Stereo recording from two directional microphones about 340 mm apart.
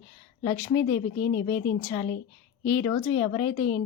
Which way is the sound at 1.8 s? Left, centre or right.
Centre.